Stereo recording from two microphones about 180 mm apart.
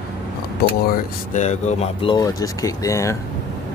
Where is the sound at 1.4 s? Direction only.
40° left (ahead or behind); by 3.2 s 15° left (ahead or behind).